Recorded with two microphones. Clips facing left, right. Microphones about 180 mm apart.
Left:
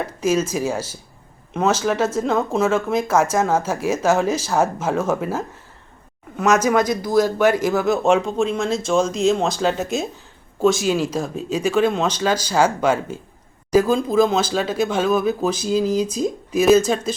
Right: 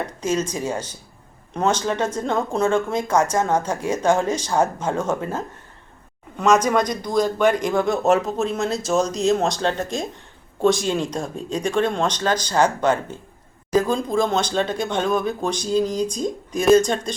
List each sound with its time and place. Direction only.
0.2 s speech: 10° left (ahead or behind)